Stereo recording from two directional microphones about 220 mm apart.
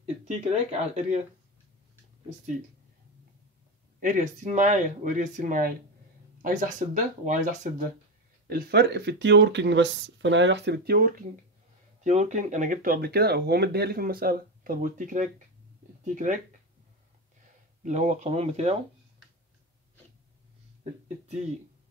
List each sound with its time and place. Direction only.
0.0 s speech: 30° right (ahead or behind)
4.0 s speech: 35° right (ahead or behind)
8.5 s speech: 45° right (ahead or behind)
12.0 s speech: 30° right (ahead or behind)
17.8 s speech: 30° right (ahead or behind)